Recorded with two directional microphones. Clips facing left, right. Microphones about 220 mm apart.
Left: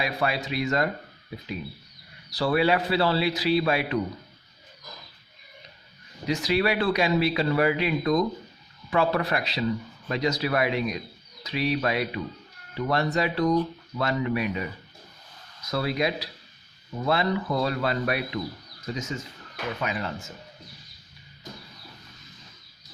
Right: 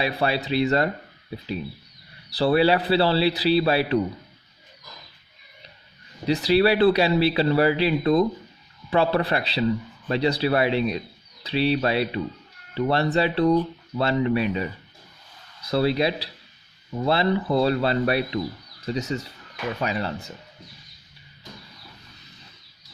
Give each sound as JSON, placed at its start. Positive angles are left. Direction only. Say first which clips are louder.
{"t": 0.0, "sound": "speech", "louder": "right 3 dB", "side_deg": -30}
{"t": 2.3, "sound": "speech", "louder": "right 4 dB", "side_deg": -30}
{"t": 6.2, "sound": "speech", "louder": "right 5 dB", "side_deg": -35}